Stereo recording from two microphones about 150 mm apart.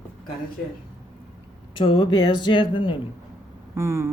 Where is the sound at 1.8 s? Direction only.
35° left (ahead or behind).